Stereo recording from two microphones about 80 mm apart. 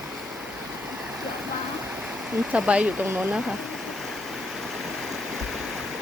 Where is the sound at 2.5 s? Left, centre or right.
Centre.